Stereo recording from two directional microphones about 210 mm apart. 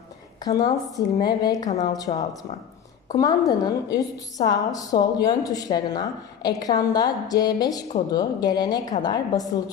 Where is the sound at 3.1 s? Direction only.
15° left (ahead or behind).